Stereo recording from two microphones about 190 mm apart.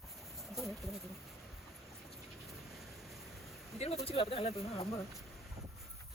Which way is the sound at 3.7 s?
35° left (ahead or behind).